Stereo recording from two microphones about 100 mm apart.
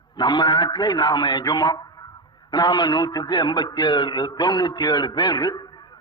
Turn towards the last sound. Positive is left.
turn(degrees=45)  # may be behind; listen again after turning